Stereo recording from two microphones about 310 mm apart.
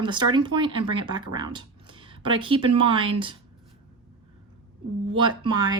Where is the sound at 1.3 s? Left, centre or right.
Centre.